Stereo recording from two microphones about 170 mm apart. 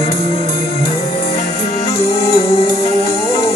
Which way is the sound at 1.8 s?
35° left (ahead or behind).